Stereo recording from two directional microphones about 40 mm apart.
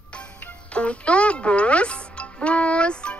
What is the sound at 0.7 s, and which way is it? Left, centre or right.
A child's voice, left.